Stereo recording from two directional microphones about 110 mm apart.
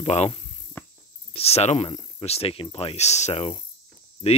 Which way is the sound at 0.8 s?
20° left (ahead or behind).